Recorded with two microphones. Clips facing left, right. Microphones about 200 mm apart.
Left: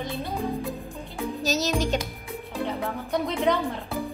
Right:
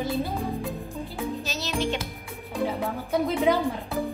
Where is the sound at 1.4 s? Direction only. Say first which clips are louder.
Left 7 dB; 40° left (ahead or behind).